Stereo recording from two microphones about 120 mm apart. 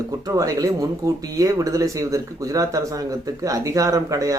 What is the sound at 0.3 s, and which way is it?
Speech, 30° right (ahead or behind).